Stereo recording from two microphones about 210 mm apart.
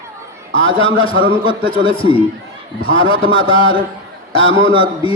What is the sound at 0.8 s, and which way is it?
A man's voice, 25° left (ahead or behind).